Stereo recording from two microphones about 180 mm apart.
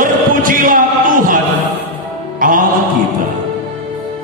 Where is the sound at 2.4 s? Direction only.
50° right (ahead or behind).